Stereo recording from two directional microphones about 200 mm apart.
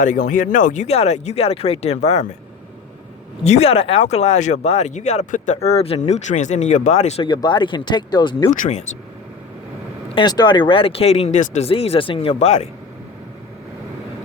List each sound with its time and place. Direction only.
0.0 s speech: 40° left (ahead or behind)
3.4 s speech: 30° left (ahead or behind)
7.3 s speech: 20° left (ahead or behind)
8.5 s speech: 40° left (ahead or behind)
10.2 s speech: 20° left (ahead or behind)